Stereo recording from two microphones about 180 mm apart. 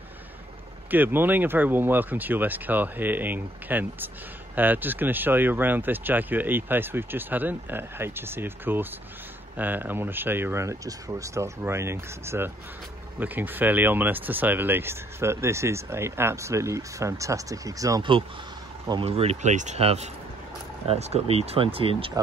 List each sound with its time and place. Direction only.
0.8 s speech: 10° right (ahead or behind); by 22.1 s 30° right (ahead or behind)